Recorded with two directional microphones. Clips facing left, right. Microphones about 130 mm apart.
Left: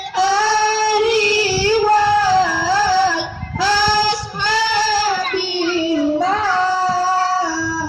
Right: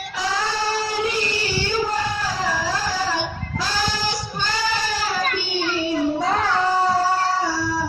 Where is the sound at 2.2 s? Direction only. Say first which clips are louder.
Left 9 dB; 90° left.